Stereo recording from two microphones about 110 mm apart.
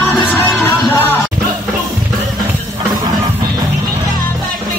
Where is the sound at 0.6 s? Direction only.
20° left (ahead or behind).